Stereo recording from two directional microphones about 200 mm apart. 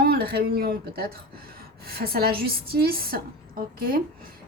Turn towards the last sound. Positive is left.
turn(degrees=-45)  # may be behind; listen again after turning